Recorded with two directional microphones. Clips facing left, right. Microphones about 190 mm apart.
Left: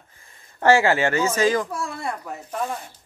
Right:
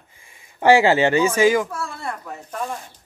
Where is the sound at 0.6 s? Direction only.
15° right (ahead or behind).